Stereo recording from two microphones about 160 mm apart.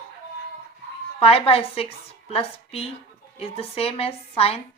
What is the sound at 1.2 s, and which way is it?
A woman's voice, 40° left (ahead or behind).